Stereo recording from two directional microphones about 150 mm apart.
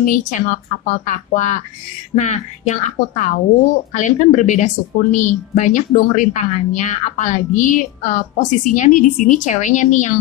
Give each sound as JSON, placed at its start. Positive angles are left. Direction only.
{"t": 0.0, "sound": "a woman's voice", "side_deg": 60}